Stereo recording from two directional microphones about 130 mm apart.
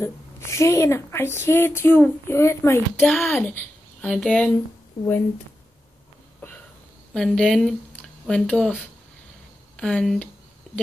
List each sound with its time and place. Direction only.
0.0 s a woman's voice: 20° left (ahead or behind)
3.0 s a child's voice: 5° left (ahead or behind)
7.2 s a child's voice: 5° left (ahead or behind)
9.8 s a child's voice: 5° left (ahead or behind)
10.7 s a sound: 5° left (ahead or behind)